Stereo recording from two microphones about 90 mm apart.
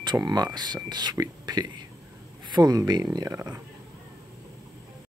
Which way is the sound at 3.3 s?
30° right (ahead or behind).